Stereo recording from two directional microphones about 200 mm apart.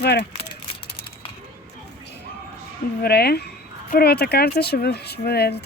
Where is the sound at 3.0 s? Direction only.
55° left (ahead or behind).